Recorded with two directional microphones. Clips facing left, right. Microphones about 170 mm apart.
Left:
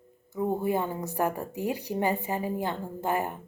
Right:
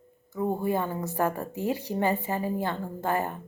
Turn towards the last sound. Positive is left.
turn(degrees=15)  # may be behind; listen again after turning